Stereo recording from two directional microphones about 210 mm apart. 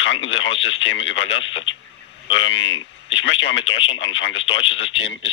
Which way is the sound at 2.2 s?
60° left (ahead or behind).